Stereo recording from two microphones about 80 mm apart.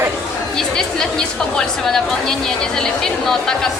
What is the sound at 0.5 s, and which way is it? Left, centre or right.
Chatter, centre.